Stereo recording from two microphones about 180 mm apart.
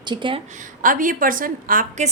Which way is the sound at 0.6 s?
50° right (ahead or behind).